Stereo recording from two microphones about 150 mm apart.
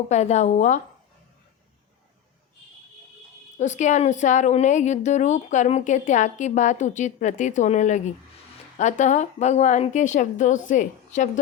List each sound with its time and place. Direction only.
0.1 s speech: 50° left (ahead or behind)
3.6 s speech: 55° left (ahead or behind)